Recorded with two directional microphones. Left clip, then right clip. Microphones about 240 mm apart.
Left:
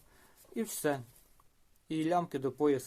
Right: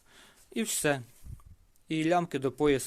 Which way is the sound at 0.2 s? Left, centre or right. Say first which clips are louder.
Right 4 dB; right.